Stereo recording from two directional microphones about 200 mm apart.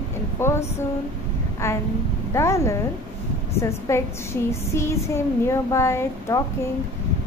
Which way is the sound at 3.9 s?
15° left (ahead or behind).